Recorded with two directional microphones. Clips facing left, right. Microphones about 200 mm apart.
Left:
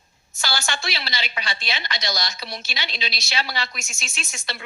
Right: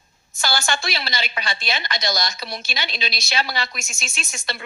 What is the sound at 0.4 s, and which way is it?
A woman's voice, 50° right (ahead or behind).